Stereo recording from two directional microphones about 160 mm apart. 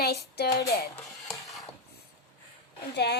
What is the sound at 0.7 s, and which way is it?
Speech, 75° left (ahead or behind).